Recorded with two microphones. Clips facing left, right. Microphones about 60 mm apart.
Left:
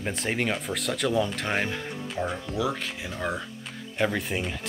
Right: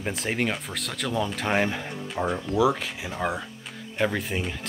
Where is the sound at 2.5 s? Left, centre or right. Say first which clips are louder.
Right 9 dB; centre.